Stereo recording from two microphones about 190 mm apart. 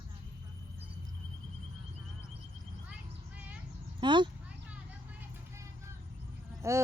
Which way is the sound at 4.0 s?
25° right (ahead or behind).